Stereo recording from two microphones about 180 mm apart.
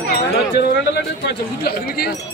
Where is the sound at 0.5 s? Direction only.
65° left (ahead or behind).